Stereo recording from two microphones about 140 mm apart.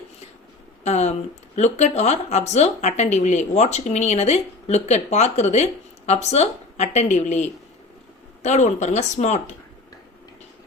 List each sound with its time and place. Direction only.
0.9 s speech: 50° left (ahead or behind)